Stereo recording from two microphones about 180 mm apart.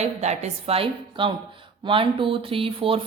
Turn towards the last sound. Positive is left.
turn(degrees=-30)  # may be behind; listen again after turning